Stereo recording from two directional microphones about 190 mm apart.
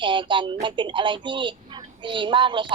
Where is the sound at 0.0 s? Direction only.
25° right (ahead or behind).